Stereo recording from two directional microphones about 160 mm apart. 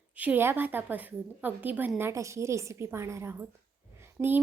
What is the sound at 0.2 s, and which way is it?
A woman's voice, 10° right (ahead or behind).